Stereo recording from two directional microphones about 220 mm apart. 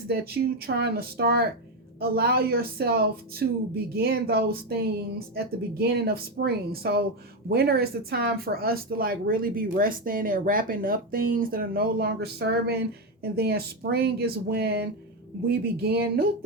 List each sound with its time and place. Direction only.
0.1 s speech: 45° right (ahead or behind)